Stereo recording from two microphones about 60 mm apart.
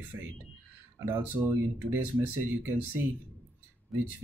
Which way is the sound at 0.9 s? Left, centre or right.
Right.